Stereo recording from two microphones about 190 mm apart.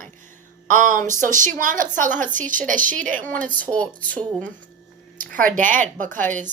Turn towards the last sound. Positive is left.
turn(degrees=-40)  # may be behind; listen again after turning